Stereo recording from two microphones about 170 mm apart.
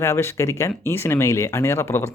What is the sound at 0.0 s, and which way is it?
Speech, 15° left (ahead or behind).